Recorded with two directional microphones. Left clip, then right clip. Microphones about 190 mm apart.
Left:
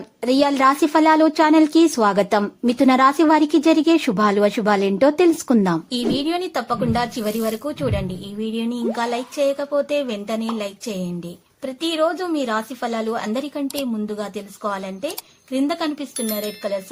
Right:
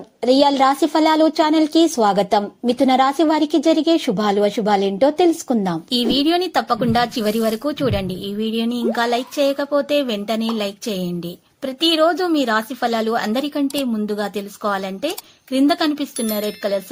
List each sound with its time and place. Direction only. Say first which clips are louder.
0.2 s a woman's voice: right 3 dB; 5° left (ahead or behind)
5.9 s a woman's voice: right 5 dB; 25° right (ahead or behind)